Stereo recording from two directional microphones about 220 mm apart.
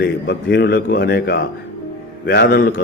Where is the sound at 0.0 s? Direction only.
50° left (ahead or behind).